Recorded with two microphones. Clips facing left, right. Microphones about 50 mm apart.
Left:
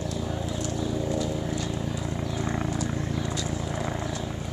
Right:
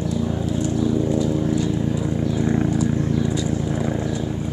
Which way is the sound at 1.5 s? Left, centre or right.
Centre.